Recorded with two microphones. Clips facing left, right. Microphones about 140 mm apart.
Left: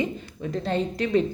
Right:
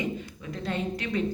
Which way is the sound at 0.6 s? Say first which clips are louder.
Left 4 dB; 35° left (ahead or behind).